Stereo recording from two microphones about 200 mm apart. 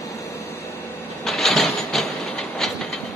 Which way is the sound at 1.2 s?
Centre (ahead or behind).